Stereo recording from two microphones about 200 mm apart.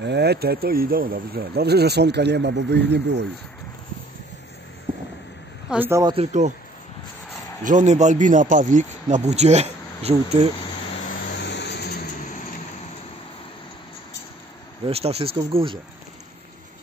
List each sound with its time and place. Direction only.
0.0 s speech: 55° right (ahead or behind)
5.7 s speech: 10° right (ahead or behind)
6.1 s speech: 35° right (ahead or behind)
7.6 s speech: 35° right (ahead or behind)
11.4 s vehicle: 60° left (ahead or behind)
14.9 s speech: 30° right (ahead or behind)